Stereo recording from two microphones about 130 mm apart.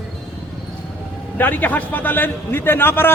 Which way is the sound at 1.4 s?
15° left (ahead or behind).